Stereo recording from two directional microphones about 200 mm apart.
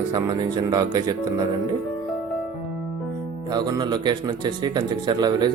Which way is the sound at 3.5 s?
20° right (ahead or behind).